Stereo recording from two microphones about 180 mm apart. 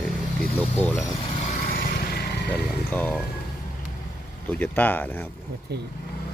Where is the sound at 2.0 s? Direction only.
60° left (ahead or behind).